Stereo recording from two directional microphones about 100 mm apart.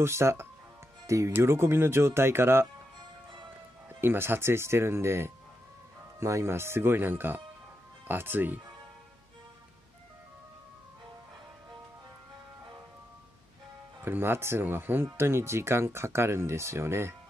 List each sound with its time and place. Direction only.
0.0 s speech: 25° right (ahead or behind)
4.0 s speech: 20° right (ahead or behind)
14.0 s speech: 20° right (ahead or behind)